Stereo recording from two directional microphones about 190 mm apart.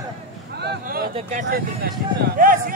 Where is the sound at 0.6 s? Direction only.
60° right (ahead or behind).